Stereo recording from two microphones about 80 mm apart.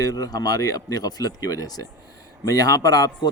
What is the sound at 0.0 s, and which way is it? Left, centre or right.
A man's voice, left.